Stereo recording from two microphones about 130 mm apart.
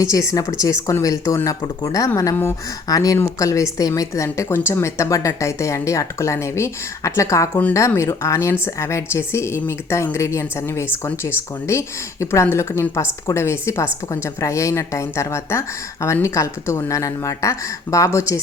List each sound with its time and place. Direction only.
0.0 s a woman's voice: 25° left (ahead or behind)